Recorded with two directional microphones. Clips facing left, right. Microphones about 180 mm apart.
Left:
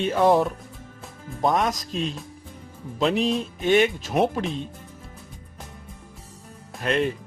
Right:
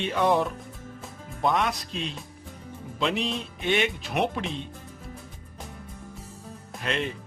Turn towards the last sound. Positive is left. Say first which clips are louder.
# left 6 dB
turn(degrees=45)  # may be behind; listen again after turning